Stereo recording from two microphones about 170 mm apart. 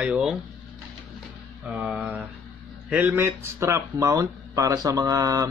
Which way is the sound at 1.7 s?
5° right (ahead or behind).